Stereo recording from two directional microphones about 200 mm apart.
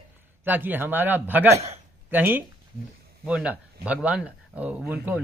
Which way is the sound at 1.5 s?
30° right (ahead or behind).